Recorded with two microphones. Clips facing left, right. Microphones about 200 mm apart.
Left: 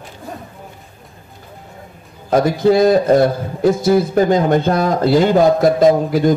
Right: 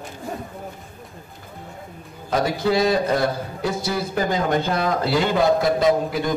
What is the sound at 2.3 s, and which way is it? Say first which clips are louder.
A man's voice: left 8 dB; 45° left (ahead or behind).